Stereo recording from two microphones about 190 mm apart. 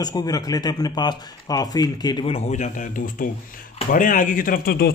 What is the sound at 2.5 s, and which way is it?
Speech, 40° left (ahead or behind).